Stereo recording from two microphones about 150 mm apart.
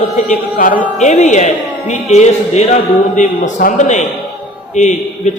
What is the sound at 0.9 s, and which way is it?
A man's voice, 50° left (ahead or behind).